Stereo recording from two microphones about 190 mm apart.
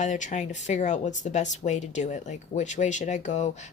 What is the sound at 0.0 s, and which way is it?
Speech, 40° left (ahead or behind).